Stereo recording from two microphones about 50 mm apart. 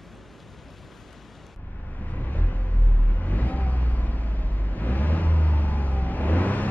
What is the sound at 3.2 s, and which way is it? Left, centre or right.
Vehicle, left.